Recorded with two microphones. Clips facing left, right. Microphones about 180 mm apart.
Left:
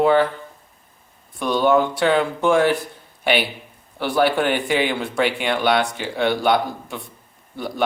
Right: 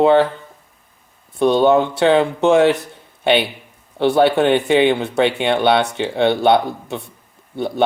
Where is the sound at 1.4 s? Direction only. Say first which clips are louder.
Right 4 dB; 25° right (ahead or behind).